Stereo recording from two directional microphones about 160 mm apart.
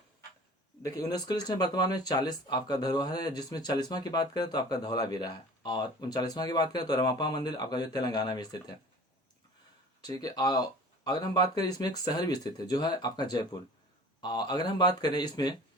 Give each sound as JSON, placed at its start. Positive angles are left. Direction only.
{"t": 0.8, "sound": "speech", "side_deg": 25}
{"t": 10.0, "sound": "speech", "side_deg": 20}